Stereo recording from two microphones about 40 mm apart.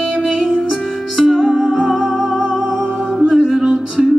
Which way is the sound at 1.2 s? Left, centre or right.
Centre.